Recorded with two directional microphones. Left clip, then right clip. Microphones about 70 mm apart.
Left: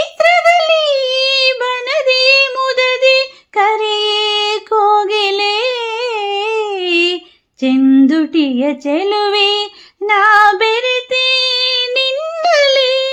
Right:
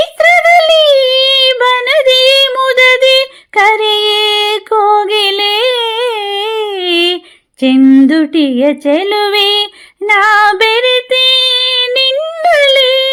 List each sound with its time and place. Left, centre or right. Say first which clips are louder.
0.0 s a sound: right 3 dB; right
8.2 s speech: right 4 dB; right
10.1 s female singing: right 1 dB; right
10.5 s female singing: right 4 dB; right
12.1 s humming: right 3 dB; centre